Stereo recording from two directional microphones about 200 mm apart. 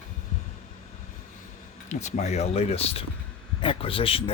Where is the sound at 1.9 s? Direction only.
35° left (ahead or behind).